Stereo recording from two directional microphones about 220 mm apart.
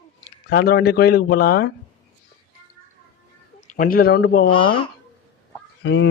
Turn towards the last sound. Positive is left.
turn(degrees=55)  # may be behind; listen again after turning